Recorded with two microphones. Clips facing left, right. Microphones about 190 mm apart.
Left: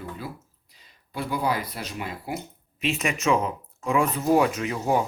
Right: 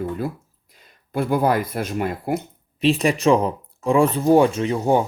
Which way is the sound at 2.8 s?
35° right (ahead or behind).